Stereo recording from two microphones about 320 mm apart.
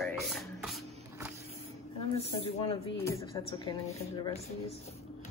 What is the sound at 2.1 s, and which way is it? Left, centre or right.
A woman's voice, centre.